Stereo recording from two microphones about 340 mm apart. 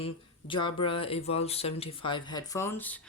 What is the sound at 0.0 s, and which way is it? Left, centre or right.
Speech, centre.